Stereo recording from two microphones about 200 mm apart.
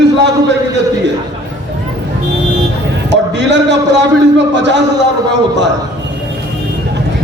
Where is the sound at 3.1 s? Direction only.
60° right (ahead or behind).